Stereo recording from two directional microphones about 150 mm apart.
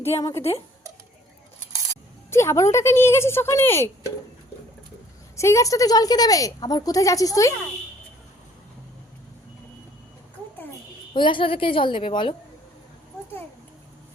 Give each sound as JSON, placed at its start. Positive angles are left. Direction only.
{"t": 0.2, "sound": "a woman's voice", "side_deg": 20}
{"t": 2.3, "sound": "speech", "side_deg": 20}
{"t": 5.4, "sound": "a woman's voice", "side_deg": 20}
{"t": 11.1, "sound": "a woman's voice", "side_deg": 35}